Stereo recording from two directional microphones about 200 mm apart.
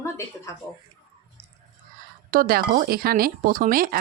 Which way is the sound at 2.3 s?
45° right (ahead or behind).